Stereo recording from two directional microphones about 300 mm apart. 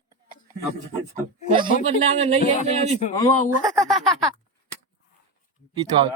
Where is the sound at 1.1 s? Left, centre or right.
Centre.